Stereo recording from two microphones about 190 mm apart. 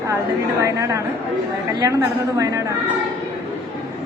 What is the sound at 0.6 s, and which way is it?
Speech, 15° right (ahead or behind).